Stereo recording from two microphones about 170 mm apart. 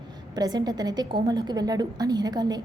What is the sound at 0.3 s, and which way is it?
A woman's voice, 25° right (ahead or behind).